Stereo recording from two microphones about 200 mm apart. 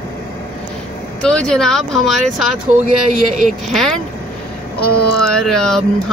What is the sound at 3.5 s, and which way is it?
Speech, centre (ahead or behind).